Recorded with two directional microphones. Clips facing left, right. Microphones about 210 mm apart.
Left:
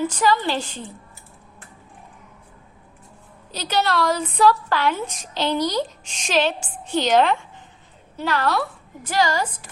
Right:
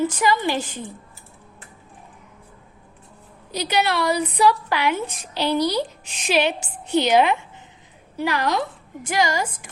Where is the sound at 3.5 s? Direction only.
15° right (ahead or behind).